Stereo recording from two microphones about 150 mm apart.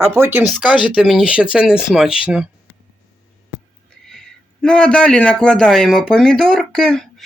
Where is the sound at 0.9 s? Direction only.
5° right (ahead or behind).